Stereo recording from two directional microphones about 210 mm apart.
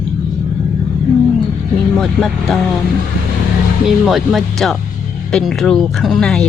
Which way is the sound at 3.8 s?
Centre (ahead or behind).